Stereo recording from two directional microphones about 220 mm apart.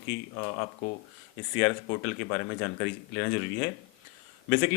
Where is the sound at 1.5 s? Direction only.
10° left (ahead or behind).